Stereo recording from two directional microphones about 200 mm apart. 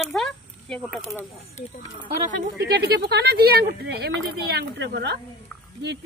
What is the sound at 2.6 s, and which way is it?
Speech, 55° right (ahead or behind).